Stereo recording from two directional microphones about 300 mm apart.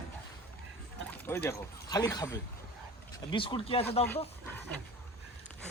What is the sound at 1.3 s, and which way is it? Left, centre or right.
Speech, centre.